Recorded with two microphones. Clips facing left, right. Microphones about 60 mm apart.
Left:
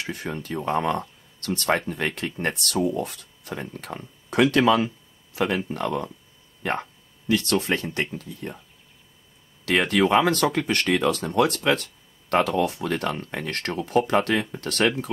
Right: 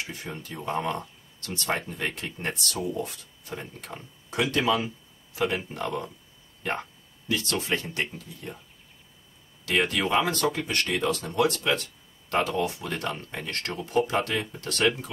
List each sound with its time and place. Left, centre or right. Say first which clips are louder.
0.0 s speech: left 5 dB; left
2.7 s speech: left 6 dB; left
6.7 s a sound: left 4 dB; left
7.3 s speech: left 5 dB; left
9.7 s speech: left 5 dB; left